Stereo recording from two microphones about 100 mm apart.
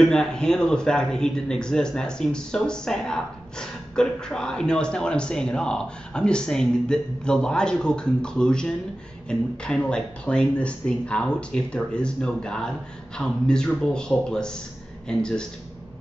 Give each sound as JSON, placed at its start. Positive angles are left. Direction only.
{"t": 0.0, "sound": "a man's voice", "side_deg": 5}